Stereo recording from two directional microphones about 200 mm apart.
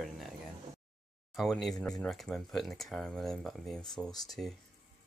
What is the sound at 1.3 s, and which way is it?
Speech, centre (ahead or behind).